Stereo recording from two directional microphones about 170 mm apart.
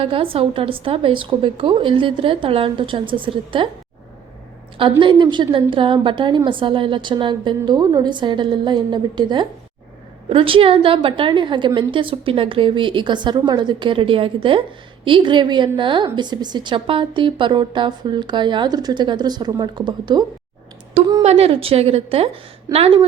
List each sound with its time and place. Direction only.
0.0 s a woman's voice: 30° right (ahead or behind)
4.8 s a woman's voice: 30° right (ahead or behind)
21.2 s a woman's voice: 35° right (ahead or behind)